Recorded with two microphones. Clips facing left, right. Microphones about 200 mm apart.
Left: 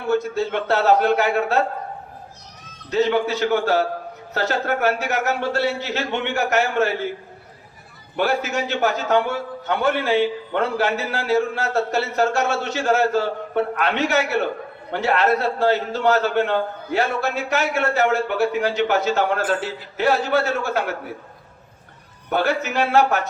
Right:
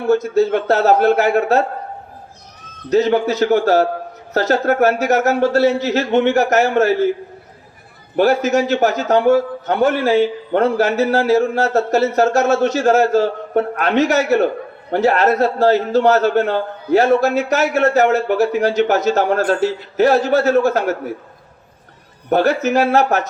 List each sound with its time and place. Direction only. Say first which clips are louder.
0.1 s a man's voice: right 7 dB; 40° right (ahead or behind)
2.9 s a man's voice: right 5 dB; 40° right (ahead or behind)
8.1 s a man's voice: right 8 dB; 40° right (ahead or behind)
22.3 s a man's voice: right 7 dB; 40° right (ahead or behind)